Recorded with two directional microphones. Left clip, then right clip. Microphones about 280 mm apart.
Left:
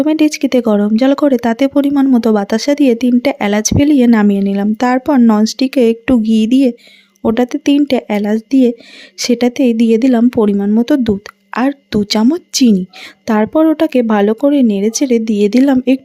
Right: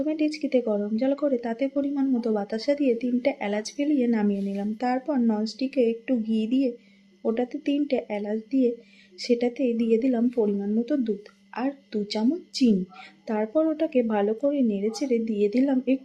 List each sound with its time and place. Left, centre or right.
0.0 s speech: left